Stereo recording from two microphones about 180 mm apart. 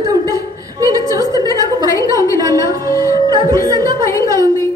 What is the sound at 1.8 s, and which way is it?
Speech, 15° left (ahead or behind).